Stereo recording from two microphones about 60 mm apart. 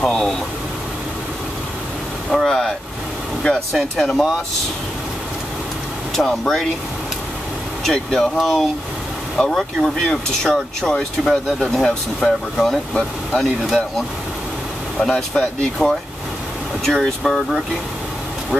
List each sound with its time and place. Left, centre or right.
0.0 s speech: centre
2.2 s speech: centre
3.4 s speech: centre
3.9 s speech: centre
6.1 s speech: centre
7.8 s speech: centre
11.2 s speech: centre
11.7 s speech: centre